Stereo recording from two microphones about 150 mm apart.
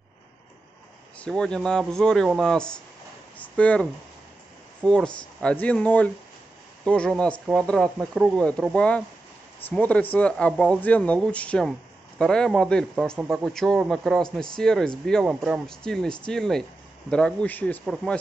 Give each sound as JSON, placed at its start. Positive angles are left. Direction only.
{"t": 1.2, "sound": "speech", "side_deg": 5}
{"t": 4.8, "sound": "speech", "side_deg": 5}
{"t": 8.4, "sound": "speech", "side_deg": 5}
{"t": 15.2, "sound": "speech", "side_deg": -5}
{"t": 15.6, "sound": "speech", "side_deg": 5}